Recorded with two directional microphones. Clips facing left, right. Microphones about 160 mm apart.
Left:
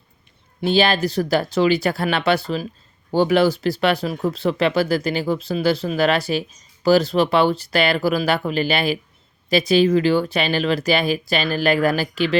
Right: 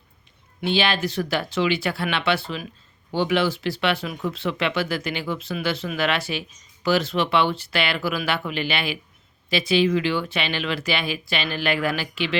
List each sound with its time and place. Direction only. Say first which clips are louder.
0.6 s speech: left 5 dB; 40° left (ahead or behind)